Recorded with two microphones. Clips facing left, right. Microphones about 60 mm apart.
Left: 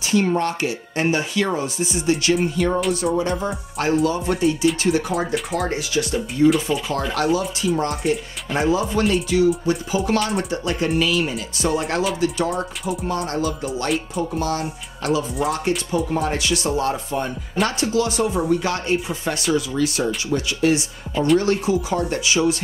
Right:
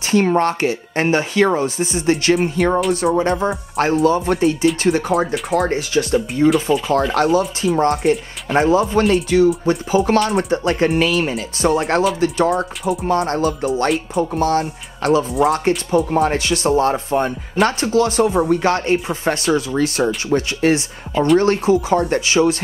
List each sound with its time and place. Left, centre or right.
0.0 s speech: right
6.7 s speech: right
8.6 s speech: right
12.4 s speech: right
13.0 s speech: right
16.1 s speech: right